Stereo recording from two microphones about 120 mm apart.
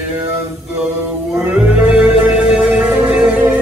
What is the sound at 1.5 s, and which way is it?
Music, 15° right (ahead or behind).